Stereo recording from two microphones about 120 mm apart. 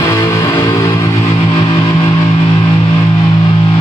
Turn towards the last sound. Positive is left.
turn(degrees=35)  # may be behind; listen again after turning